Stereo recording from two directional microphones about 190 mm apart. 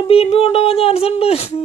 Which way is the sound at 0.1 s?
30° left (ahead or behind).